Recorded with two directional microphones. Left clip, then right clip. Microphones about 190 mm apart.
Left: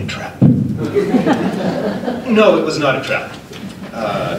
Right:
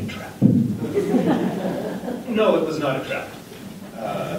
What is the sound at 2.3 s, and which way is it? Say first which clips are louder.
Speech: left 7 dB; 30° left (ahead or behind).